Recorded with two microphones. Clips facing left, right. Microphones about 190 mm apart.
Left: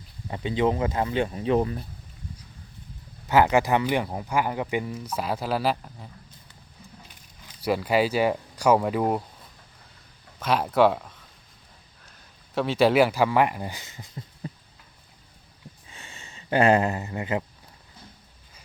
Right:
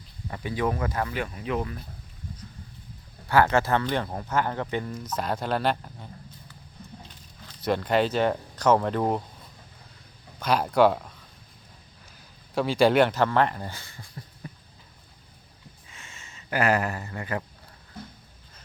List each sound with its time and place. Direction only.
0.3 s speech: 20° left (ahead or behind)
3.2 s speech: 15° left (ahead or behind)
7.4 s speech: 5° left (ahead or behind)
10.4 s speech: centre (ahead or behind)
12.5 s speech: centre (ahead or behind); by 14.5 s 20° left (ahead or behind)
15.9 s a sound: 35° left (ahead or behind)